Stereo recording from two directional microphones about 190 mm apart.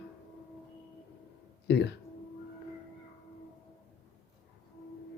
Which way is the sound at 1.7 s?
65° left (ahead or behind).